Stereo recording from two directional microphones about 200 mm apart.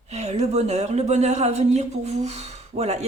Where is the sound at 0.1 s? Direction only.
35° right (ahead or behind).